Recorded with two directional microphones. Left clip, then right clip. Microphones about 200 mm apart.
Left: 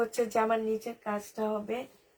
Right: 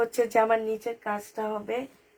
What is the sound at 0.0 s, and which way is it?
Speech, 45° right (ahead or behind).